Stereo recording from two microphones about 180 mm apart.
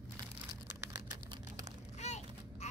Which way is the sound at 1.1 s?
25° right (ahead or behind).